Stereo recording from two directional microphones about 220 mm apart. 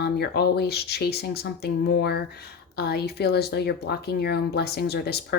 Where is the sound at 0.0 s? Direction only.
45° left (ahead or behind).